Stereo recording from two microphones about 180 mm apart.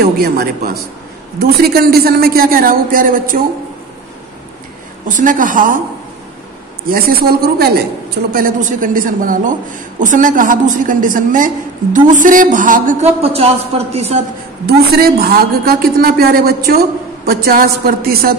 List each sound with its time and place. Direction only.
0.0 s a man's voice: 60° right (ahead or behind)
5.0 s a man's voice: 45° right (ahead or behind)
6.9 s a man's voice: 60° right (ahead or behind); by 14.2 s 35° right (ahead or behind)
14.7 s a man's voice: 60° right (ahead or behind)